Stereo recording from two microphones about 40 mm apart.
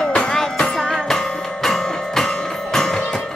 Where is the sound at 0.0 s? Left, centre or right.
Centre.